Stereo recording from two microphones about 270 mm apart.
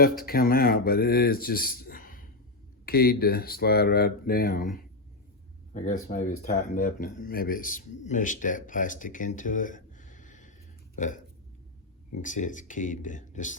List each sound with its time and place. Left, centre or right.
0.0 s speech: left
10.9 s a sound: left
12.1 s speech: left